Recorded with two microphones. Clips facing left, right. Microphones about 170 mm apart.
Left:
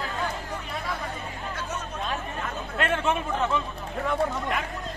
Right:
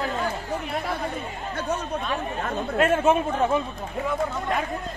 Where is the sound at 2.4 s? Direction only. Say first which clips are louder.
Right 10 dB; 45° right (ahead or behind).